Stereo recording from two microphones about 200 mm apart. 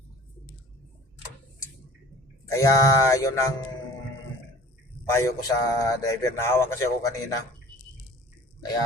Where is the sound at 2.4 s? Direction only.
15° left (ahead or behind).